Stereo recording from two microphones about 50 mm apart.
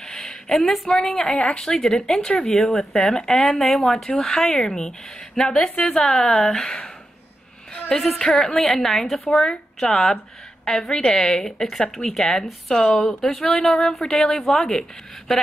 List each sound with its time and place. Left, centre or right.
0.1 s speech: centre
1.3 s speech: left
1.6 s speech: centre
7.9 s a woman's voice: centre